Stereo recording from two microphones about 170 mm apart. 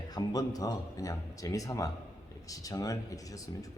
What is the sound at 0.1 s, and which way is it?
Speech, 20° left (ahead or behind).